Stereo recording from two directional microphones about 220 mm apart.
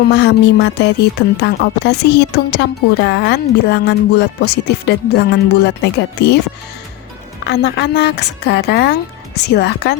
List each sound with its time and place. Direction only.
0.2 s speech: 50° left (ahead or behind)
7.4 s speech: 50° left (ahead or behind)